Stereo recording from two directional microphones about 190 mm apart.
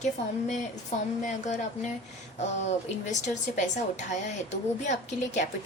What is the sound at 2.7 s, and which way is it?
A woman's voice, 40° left (ahead or behind).